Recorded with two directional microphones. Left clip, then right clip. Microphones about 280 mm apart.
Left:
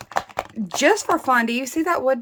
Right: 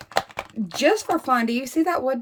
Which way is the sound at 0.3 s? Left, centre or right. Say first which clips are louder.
Left 3 dB; centre.